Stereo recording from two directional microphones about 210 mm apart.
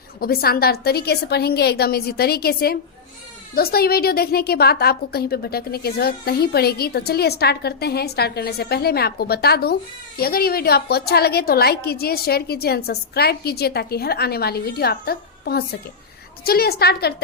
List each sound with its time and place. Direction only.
0.2 s a woman's voice: 45° left (ahead or behind)